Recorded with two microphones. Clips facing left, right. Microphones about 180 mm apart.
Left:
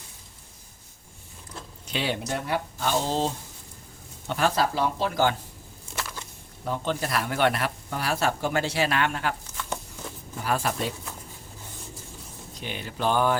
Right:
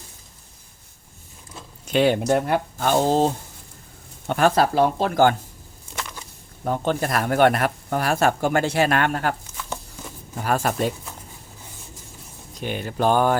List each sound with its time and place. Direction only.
1.9 s speech: 50° right (ahead or behind)
6.7 s speech: 50° right (ahead or behind)
10.3 s speech: 45° right (ahead or behind)
12.5 s speech: 50° right (ahead or behind)